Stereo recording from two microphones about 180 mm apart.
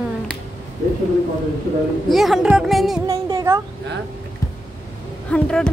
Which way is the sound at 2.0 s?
Centre (ahead or behind).